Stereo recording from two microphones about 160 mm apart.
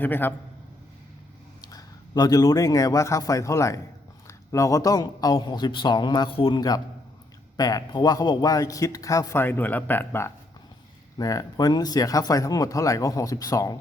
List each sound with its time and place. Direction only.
0.0 s a man's voice: 10° left (ahead or behind)
1.6 s a man's voice: 25° left (ahead or behind)